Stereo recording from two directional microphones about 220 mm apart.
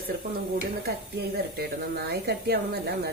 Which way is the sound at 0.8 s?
45° right (ahead or behind).